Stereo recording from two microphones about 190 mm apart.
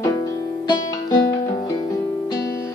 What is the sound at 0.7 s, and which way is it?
Music, 20° left (ahead or behind).